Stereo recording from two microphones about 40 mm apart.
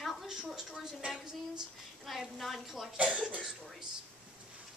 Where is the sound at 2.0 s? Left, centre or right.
Centre.